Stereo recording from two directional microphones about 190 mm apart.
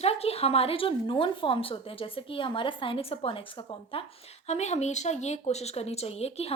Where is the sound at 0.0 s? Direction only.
30° left (ahead or behind).